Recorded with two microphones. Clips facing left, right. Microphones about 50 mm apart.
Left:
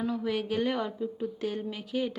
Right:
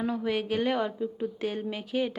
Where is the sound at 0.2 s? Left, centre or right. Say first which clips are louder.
Right 1 dB; centre.